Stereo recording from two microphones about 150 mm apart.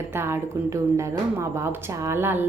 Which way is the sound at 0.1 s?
15° right (ahead or behind).